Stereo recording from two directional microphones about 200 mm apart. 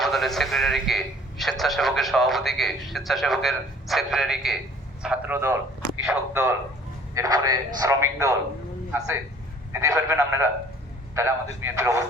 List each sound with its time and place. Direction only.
0.0 s a man's voice: centre (ahead or behind); by 8.4 s 15° right (ahead or behind)
9.7 s a man's voice: 15° right (ahead or behind)